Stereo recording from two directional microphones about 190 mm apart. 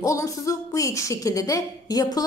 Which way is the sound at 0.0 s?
15° left (ahead or behind).